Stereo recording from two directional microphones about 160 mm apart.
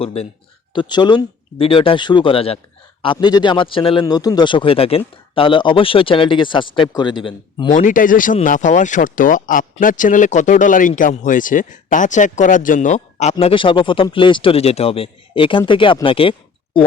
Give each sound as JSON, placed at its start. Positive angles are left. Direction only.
{"t": 0.0, "sound": "a man's voice", "side_deg": 40}
{"t": 7.7, "sound": "speech", "side_deg": 55}
{"t": 13.4, "sound": "a man's voice", "side_deg": 35}